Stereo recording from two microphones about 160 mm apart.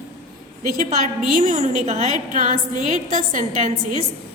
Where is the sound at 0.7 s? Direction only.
60° right (ahead or behind).